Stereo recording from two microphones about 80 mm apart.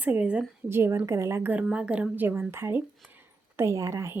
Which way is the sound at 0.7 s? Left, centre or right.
Right.